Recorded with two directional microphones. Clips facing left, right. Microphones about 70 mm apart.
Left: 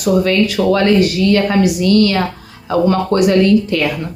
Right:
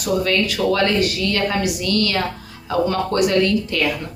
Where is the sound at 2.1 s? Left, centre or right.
Left.